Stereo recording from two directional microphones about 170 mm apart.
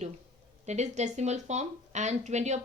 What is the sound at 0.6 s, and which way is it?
Speech, 40° right (ahead or behind).